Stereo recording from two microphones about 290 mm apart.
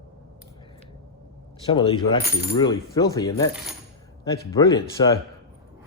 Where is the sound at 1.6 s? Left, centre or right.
Centre.